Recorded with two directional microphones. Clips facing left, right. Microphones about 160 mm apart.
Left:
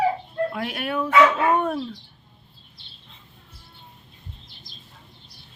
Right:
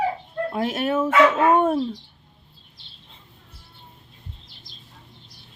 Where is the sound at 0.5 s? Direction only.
25° right (ahead or behind).